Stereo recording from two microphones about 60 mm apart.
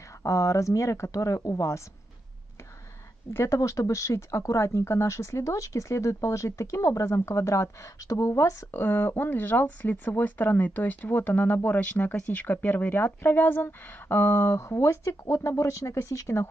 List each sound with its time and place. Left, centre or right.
0.2 s speech: left
3.3 s speech: left
8.7 s speech: left